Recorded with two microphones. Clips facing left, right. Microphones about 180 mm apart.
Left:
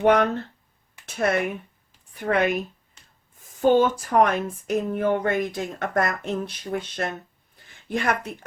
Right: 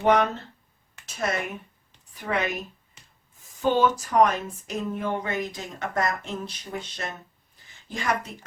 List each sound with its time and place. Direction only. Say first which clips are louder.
0.0 s speech: left 2 dB; 55° left (ahead or behind)
3.6 s speech: left 4 dB; 50° left (ahead or behind)